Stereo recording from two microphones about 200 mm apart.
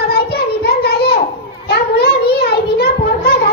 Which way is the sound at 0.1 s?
50° left (ahead or behind).